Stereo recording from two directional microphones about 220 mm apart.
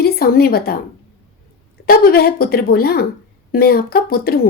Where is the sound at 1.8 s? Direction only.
45° left (ahead or behind).